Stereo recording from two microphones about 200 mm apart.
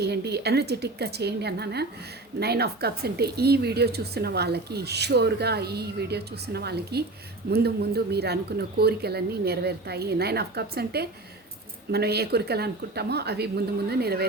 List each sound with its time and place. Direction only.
0.0 s a woman's voice: 55° right (ahead or behind)